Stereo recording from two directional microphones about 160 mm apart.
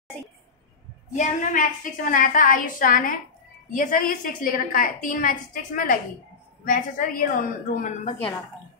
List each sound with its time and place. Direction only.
1.1 s a woman's voice: 50° left (ahead or behind)